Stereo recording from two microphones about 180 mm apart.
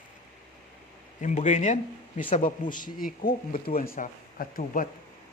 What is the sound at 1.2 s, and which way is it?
Speech, 40° left (ahead or behind).